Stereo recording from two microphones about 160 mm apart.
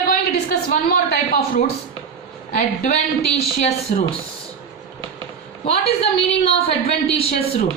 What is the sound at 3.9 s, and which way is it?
Speech, 55° left (ahead or behind).